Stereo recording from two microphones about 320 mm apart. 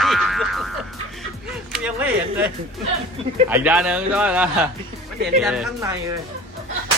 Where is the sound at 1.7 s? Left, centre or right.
Centre.